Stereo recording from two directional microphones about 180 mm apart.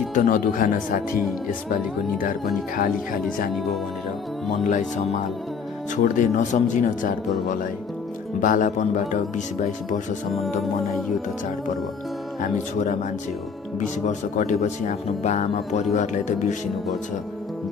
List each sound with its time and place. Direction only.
0.1 s a woman's voice: 45° left (ahead or behind)
4.6 s a woman's voice: 45° left (ahead or behind)
6.0 s a woman's voice: 45° left (ahead or behind)
10.3 s music: centre (ahead or behind)
13.7 s speech: 40° left (ahead or behind)